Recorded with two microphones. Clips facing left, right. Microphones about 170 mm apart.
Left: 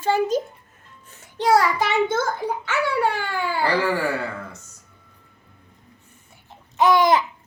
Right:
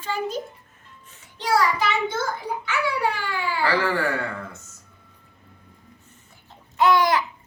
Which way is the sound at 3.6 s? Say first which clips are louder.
Left 1 dB; 10° left (ahead or behind).